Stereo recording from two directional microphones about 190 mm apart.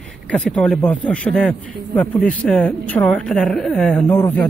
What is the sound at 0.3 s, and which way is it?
Speech, 5° left (ahead or behind).